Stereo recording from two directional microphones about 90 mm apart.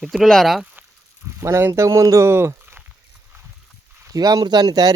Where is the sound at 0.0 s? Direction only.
Centre (ahead or behind).